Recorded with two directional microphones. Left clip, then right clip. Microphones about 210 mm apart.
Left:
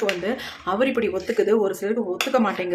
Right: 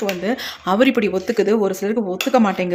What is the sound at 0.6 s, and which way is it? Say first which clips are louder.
Speech: right 5 dB; 40° right (ahead or behind).